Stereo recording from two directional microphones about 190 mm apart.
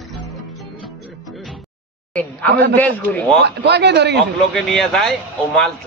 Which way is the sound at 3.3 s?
60° right (ahead or behind).